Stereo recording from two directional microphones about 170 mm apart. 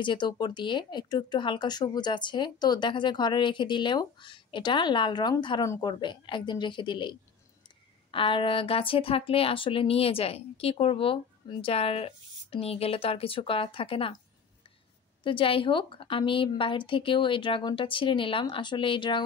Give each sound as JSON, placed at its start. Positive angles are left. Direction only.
{"t": 0.0, "sound": "speech", "side_deg": 25}
{"t": 15.2, "sound": "speech", "side_deg": 30}